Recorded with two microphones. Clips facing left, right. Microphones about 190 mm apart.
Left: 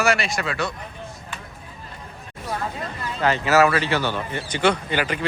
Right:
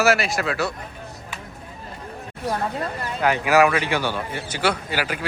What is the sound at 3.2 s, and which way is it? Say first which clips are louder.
Speech: even; 10° right (ahead or behind).